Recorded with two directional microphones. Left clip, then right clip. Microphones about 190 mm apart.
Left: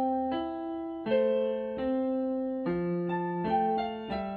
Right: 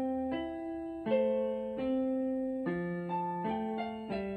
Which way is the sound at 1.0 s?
35° left (ahead or behind).